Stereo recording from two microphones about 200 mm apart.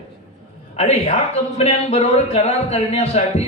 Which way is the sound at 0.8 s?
35° left (ahead or behind).